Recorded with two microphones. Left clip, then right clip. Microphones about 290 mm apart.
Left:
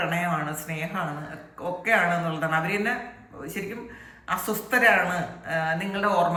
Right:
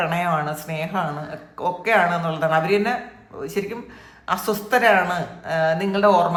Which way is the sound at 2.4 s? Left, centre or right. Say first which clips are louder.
Right 10 dB; centre.